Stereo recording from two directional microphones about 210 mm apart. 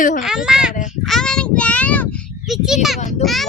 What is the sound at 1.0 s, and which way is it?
Child singing, centre (ahead or behind).